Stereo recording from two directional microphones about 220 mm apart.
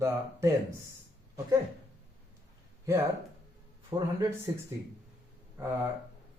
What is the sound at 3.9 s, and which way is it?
Speech, 15° right (ahead or behind).